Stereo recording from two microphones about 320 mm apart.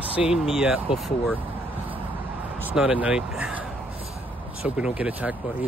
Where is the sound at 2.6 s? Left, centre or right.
Centre.